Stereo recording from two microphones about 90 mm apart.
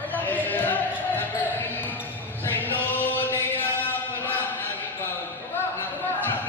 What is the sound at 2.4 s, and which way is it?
Chant, 20° left (ahead or behind).